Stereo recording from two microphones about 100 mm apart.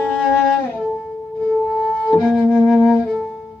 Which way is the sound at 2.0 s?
5° left (ahead or behind).